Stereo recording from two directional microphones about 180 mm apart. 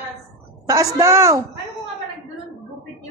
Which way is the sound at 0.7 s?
20° right (ahead or behind).